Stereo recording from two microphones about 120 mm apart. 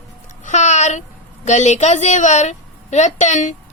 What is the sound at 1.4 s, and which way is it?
A woman's voice, 75° left (ahead or behind).